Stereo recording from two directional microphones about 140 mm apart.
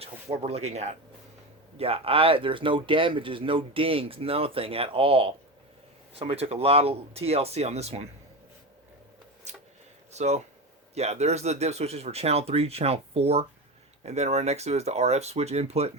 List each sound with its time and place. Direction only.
0.0 s speech: 45° right (ahead or behind)
9.5 s a sound: 55° right (ahead or behind)
10.1 s speech: 50° right (ahead or behind)